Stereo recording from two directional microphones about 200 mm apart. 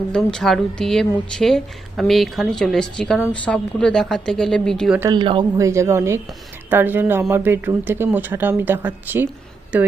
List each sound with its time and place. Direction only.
0.1 s speech: 5° left (ahead or behind)
4.9 s speech: 20° right (ahead or behind)